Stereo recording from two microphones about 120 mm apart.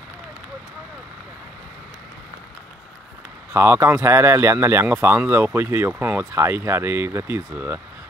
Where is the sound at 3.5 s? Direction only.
20° right (ahead or behind).